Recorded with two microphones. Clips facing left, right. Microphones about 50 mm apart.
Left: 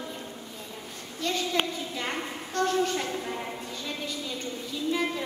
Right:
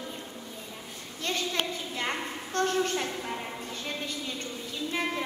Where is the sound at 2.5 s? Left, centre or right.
Right.